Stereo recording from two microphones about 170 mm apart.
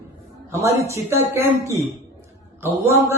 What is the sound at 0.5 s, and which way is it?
A man's voice, 20° right (ahead or behind).